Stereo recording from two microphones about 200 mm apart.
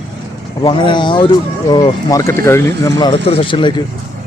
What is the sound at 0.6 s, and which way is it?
Speech, 25° left (ahead or behind).